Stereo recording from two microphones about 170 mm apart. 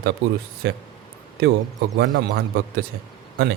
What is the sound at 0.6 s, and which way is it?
Speech, 90° right.